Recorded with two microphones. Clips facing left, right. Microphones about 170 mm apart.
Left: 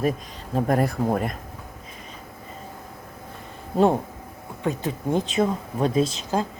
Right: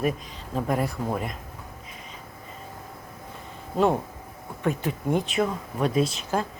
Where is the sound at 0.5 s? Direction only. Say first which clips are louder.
Left 4 dB; 45° left (ahead or behind).